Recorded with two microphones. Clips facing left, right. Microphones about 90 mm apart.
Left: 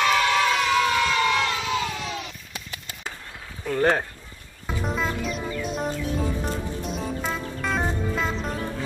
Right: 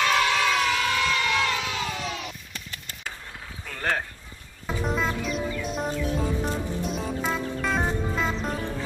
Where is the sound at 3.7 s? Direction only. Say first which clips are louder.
Left 7 dB; 25° left (ahead or behind).